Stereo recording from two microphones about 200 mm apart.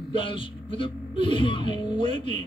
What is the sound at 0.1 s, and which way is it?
Speech, 25° left (ahead or behind).